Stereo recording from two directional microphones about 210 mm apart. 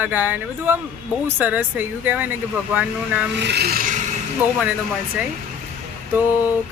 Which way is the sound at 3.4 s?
50° right (ahead or behind).